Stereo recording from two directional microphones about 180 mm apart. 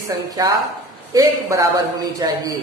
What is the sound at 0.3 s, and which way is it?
A woman's voice, 20° right (ahead or behind).